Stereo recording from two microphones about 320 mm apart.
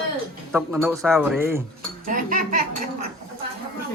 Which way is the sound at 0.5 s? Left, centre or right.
Centre.